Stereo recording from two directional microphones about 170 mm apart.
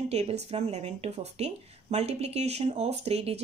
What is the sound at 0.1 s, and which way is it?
Speech, 40° right (ahead or behind).